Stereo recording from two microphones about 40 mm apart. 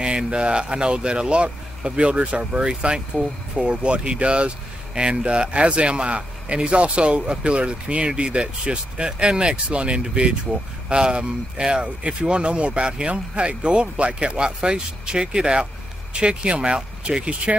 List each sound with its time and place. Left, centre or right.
0.0 s speech: right